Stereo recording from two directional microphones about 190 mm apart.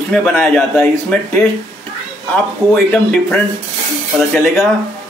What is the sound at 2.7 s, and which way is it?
Speech, 5° left (ahead or behind).